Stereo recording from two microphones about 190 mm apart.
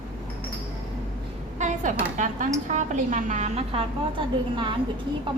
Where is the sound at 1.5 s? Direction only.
40° right (ahead or behind).